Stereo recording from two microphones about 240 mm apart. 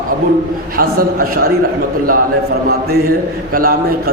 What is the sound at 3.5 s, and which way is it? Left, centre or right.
Speech, right.